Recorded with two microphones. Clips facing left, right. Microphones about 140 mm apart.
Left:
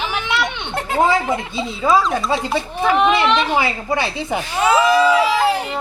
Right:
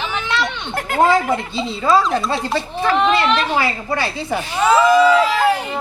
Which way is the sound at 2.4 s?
15° left (ahead or behind).